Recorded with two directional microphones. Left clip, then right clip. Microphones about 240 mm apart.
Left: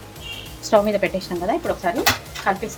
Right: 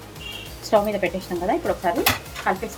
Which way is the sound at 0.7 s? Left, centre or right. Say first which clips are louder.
Left 3 dB; centre.